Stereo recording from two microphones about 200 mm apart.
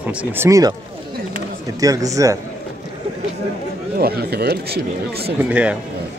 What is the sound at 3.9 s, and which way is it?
Speech, 50° right (ahead or behind).